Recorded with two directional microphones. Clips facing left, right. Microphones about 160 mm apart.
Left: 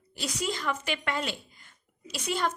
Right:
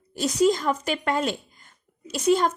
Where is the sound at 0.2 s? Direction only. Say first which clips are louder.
Right 12 dB; 40° right (ahead or behind).